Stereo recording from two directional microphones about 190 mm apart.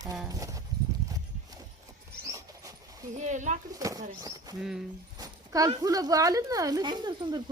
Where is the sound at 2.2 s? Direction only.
15° right (ahead or behind).